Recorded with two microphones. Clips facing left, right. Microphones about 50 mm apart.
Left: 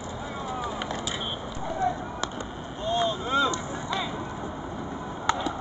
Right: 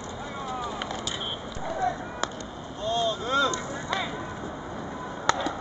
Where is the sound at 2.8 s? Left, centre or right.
Left.